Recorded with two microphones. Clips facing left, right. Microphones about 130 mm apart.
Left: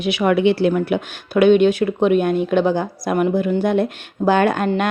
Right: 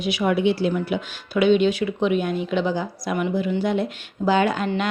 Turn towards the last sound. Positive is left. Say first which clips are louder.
# left 4 dB
turn(degrees=50)  # may be behind; listen again after turning